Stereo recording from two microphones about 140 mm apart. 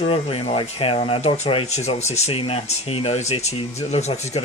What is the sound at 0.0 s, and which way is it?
Speech, 45° left (ahead or behind).